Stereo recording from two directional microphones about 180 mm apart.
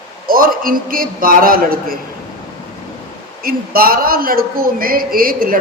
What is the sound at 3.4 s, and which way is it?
A man's voice, 55° right (ahead or behind).